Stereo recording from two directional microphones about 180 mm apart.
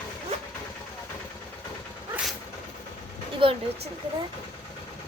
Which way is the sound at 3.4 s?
30° right (ahead or behind).